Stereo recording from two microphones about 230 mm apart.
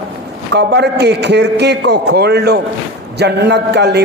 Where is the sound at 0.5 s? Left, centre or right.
Right.